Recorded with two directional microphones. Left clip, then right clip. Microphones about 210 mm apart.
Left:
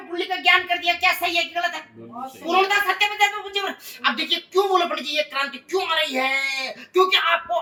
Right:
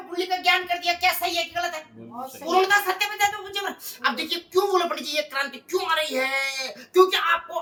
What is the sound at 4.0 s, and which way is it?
A woman's voice, 25° right (ahead or behind).